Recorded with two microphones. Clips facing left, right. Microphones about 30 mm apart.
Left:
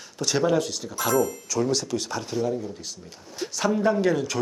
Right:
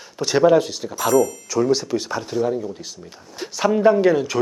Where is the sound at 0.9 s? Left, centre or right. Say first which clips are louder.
Right 6 dB; centre.